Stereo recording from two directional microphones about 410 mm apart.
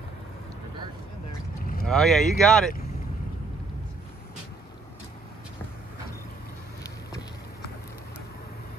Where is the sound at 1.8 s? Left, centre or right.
Centre.